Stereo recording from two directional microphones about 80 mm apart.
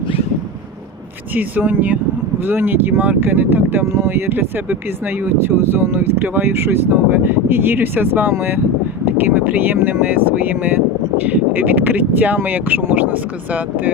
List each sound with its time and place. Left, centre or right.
1.3 s speech: right